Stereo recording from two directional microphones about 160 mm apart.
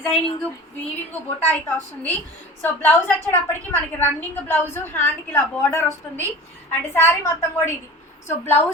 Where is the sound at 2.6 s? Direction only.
10° left (ahead or behind).